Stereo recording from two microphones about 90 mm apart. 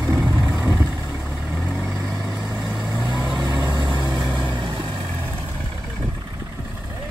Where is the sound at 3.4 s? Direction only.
40° right (ahead or behind).